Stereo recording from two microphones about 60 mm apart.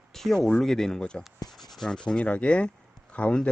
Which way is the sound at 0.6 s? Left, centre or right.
Centre.